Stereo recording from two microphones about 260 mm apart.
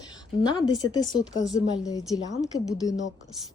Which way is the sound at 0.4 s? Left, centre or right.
Centre.